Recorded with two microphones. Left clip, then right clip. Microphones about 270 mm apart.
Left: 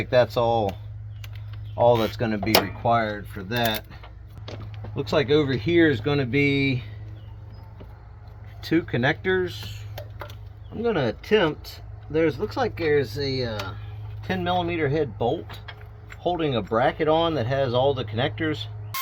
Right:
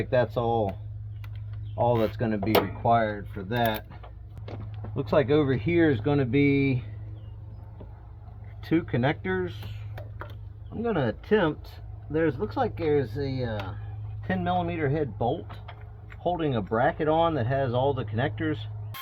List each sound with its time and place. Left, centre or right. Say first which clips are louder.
1.7 s speech: left 5 dB; left; by 3.8 s centre
4.4 s speech: left 3 dB; centre
8.6 s speech: left 3 dB; centre